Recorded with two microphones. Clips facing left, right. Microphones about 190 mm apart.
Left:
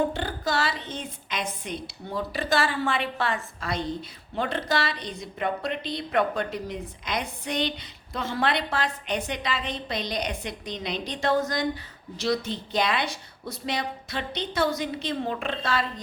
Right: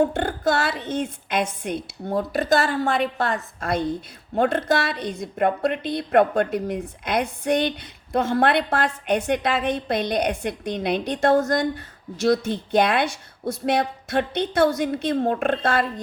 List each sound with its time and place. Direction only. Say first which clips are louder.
0.0 s a woman's voice: right 6 dB; 50° right (ahead or behind)